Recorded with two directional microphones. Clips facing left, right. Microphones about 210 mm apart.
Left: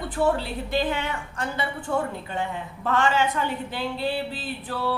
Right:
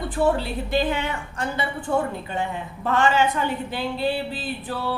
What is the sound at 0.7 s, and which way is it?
A woman's voice, 15° right (ahead or behind).